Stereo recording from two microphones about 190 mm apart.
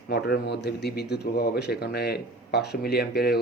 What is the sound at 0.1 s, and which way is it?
Speech, 60° left (ahead or behind).